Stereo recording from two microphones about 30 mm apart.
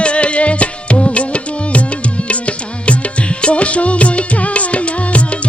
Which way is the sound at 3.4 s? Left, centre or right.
Left.